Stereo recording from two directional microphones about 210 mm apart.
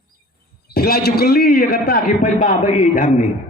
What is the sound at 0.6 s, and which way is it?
A man's voice, 45° left (ahead or behind).